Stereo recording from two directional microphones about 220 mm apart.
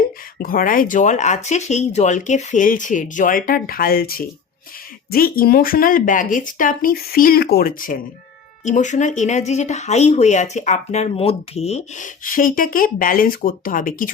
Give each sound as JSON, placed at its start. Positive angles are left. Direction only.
{"t": 0.4, "sound": "speech", "side_deg": 40}